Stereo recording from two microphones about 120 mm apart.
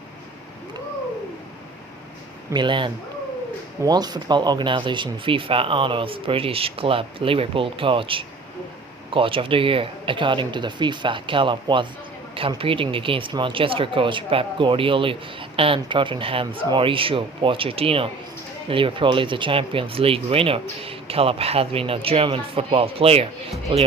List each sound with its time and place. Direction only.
2.5 s speech: 40° right (ahead or behind)